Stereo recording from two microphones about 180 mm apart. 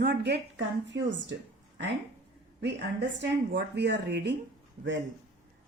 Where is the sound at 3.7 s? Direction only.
70° right (ahead or behind).